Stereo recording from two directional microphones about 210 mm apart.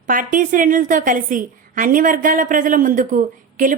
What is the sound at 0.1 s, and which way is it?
A woman's voice, 40° right (ahead or behind).